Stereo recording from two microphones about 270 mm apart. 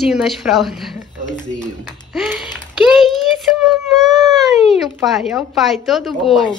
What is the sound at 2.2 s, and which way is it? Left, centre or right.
Speech, centre.